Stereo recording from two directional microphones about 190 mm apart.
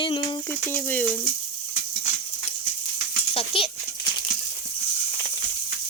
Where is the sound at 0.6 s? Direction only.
10° left (ahead or behind).